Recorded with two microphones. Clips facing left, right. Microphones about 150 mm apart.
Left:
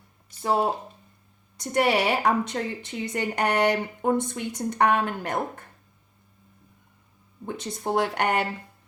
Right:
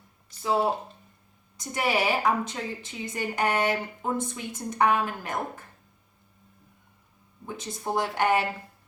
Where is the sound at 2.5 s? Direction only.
60° left (ahead or behind).